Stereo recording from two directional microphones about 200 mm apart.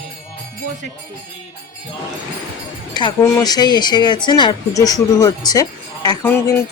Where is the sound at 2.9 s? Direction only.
20° left (ahead or behind).